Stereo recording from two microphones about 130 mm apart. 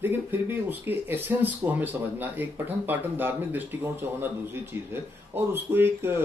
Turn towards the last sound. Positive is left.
turn(degrees=-15)  # may be behind; listen again after turning